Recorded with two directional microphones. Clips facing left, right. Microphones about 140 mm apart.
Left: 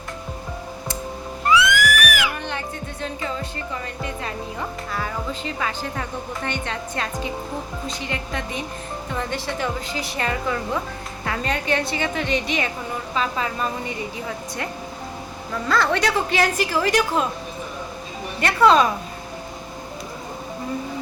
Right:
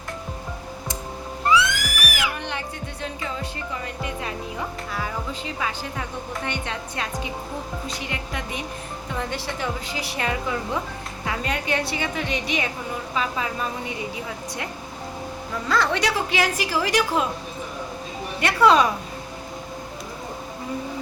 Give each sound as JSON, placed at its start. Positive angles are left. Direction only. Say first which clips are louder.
{"t": 1.5, "sound": "music", "louder": "left 3 dB", "side_deg": -30}
{"t": 2.5, "sound": "music", "louder": "left 2 dB", "side_deg": -10}
{"t": 4.9, "sound": "a woman's voice", "louder": "left 2 dB", "side_deg": -10}
{"t": 15.7, "sound": "a woman's voice", "louder": "left 2 dB", "side_deg": -15}
{"t": 18.3, "sound": "a woman's voice", "louder": "left 1 dB", "side_deg": -10}